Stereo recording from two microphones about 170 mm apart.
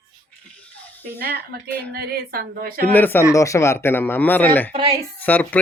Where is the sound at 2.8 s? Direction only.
10° left (ahead or behind).